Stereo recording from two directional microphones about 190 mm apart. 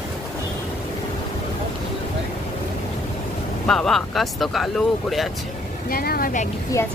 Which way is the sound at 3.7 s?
Centre (ahead or behind).